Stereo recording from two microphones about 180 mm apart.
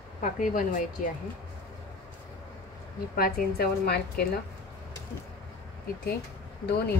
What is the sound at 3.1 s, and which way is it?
A woman's voice, 55° left (ahead or behind).